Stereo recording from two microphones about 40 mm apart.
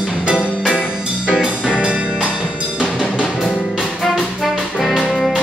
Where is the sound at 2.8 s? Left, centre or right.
Right.